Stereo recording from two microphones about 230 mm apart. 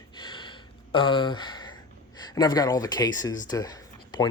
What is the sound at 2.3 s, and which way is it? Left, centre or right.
Speech, centre.